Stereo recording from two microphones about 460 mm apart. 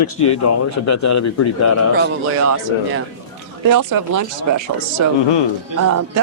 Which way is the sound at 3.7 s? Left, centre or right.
Right.